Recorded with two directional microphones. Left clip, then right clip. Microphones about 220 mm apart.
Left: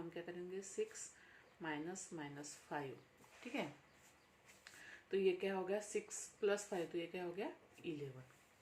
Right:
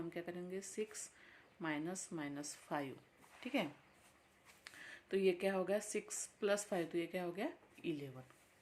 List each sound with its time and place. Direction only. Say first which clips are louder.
0.1 s a sound: right 2 dB; 50° right (ahead or behind)
1.6 s a woman's voice: right 3 dB; 50° right (ahead or behind)
4.6 s speech: right 4 dB; 45° right (ahead or behind)